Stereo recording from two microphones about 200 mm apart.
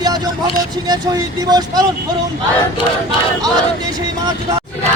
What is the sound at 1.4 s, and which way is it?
Speech, 20° right (ahead or behind).